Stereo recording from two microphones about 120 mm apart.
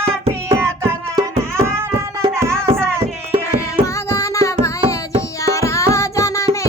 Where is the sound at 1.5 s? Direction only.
20° right (ahead or behind).